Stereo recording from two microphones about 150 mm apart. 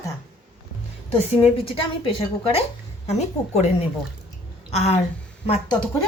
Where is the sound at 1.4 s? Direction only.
35° left (ahead or behind).